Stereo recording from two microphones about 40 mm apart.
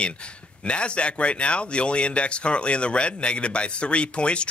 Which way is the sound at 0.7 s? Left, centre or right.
Left.